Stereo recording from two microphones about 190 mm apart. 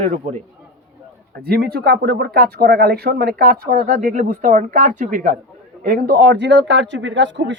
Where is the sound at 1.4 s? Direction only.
55° right (ahead or behind).